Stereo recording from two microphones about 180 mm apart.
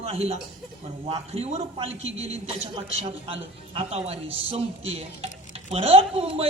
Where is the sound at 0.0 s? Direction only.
35° right (ahead or behind).